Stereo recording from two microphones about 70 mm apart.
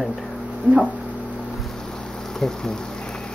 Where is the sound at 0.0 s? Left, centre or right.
Centre.